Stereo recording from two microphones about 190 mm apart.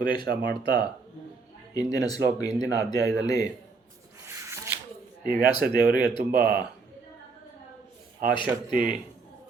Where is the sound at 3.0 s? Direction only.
70° right (ahead or behind).